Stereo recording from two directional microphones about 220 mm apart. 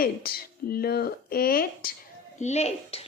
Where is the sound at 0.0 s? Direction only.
45° left (ahead or behind).